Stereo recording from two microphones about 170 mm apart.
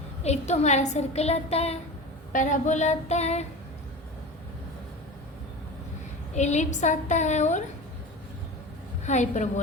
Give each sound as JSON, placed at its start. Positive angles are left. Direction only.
{"t": 0.2, "sound": "a woman's voice", "side_deg": 40}
{"t": 2.3, "sound": "a woman's voice", "side_deg": 50}
{"t": 6.3, "sound": "a woman's voice", "side_deg": 40}
{"t": 9.0, "sound": "a woman's voice", "side_deg": 45}